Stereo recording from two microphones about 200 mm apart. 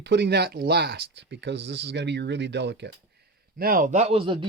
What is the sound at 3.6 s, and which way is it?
Speech, 45° right (ahead or behind).